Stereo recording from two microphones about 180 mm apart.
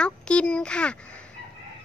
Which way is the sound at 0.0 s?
5° left (ahead or behind).